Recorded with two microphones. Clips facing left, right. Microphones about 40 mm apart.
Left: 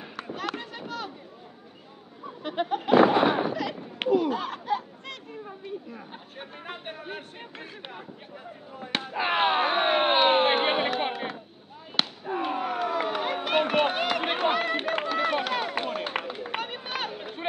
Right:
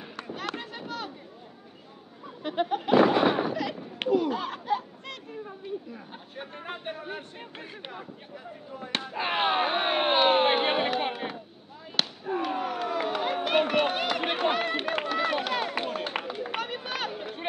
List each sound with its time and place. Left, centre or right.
0.1 s chop: centre
2.4 s a sound: centre
6.7 s speech: centre
9.0 s a sound: centre
12.0 s fireworks: centre
12.4 s run: centre
16.5 s run: left
17.1 s run: centre